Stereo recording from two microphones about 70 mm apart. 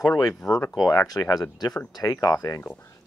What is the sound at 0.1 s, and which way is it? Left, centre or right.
Speech, left.